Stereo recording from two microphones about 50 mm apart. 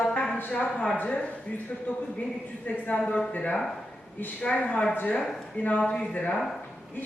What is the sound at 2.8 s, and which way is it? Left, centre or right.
A man's voice, left.